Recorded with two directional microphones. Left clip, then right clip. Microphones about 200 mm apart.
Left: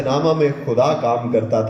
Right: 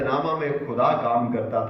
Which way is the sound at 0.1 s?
30° left (ahead or behind).